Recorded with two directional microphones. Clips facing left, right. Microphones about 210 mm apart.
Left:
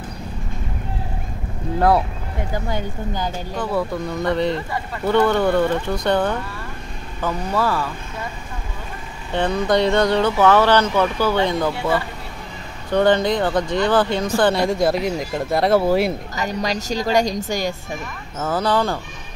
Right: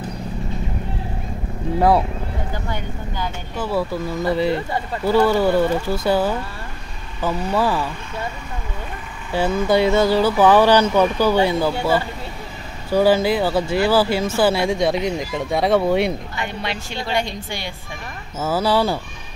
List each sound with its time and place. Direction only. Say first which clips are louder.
1.8 s speech: right 1 dB; 5° right (ahead or behind)
3.5 s speech: right 1 dB; 5° right (ahead or behind)
9.3 s speech: right 1 dB; 5° right (ahead or behind)
12.9 s speech: right 1 dB; 5° right (ahead or behind)
16.3 s a woman's voice: left 4 dB; 40° left (ahead or behind)
18.4 s speech: right 1 dB; 5° right (ahead or behind)